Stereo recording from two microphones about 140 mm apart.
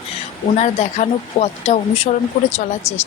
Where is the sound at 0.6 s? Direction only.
50° left (ahead or behind).